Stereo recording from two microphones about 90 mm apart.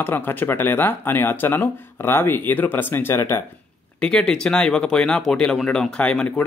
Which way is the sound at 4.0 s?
10° left (ahead or behind).